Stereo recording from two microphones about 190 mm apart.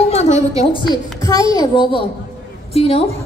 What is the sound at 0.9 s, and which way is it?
A child's voice, 20° left (ahead or behind).